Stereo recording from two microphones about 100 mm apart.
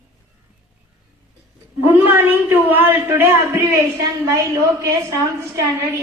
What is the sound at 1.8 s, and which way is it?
A man's voice, 20° right (ahead or behind).